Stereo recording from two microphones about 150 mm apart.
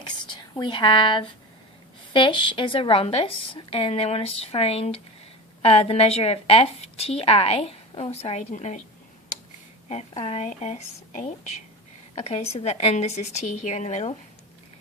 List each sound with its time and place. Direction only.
0.0 s whispering: 30° left (ahead or behind)
2.1 s a woman's voice: 35° left (ahead or behind); by 8.8 s 50° left (ahead or behind)
9.9 s a woman's voice: 45° left (ahead or behind)